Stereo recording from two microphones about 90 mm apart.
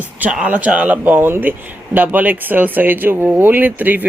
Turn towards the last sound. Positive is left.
turn(degrees=-20)  # may be behind; listen again after turning